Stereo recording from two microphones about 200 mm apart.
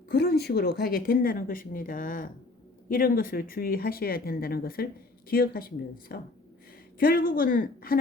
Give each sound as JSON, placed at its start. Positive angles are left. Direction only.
{"t": 0.1, "sound": "speech", "side_deg": 55}